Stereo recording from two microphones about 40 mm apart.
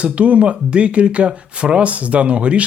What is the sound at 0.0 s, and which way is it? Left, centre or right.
Speech, right.